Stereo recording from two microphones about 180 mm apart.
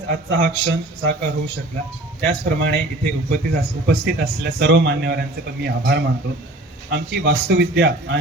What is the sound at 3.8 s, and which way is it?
A man's voice, 65° right (ahead or behind).